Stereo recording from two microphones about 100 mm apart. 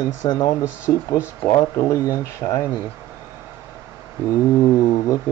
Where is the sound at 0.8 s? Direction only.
25° left (ahead or behind).